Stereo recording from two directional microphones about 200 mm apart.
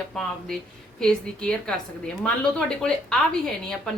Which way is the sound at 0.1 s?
Centre (ahead or behind).